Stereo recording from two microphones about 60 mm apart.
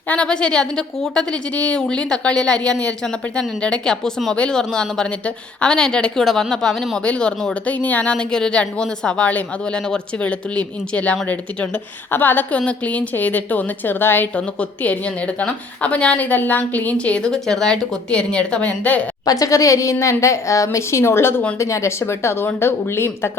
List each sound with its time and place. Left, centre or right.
0.1 s a woman's voice: centre
1.5 s a woman's voice: centre
7.7 s a woman's voice: left
8.1 s a woman's voice: centre
12.1 s a woman's voice: left
12.5 s a woman's voice: left
14.3 s a woman's voice: left
19.2 s a woman's voice: left
21.6 s speech: left